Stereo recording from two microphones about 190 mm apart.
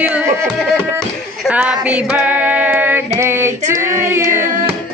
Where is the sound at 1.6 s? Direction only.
5° right (ahead or behind).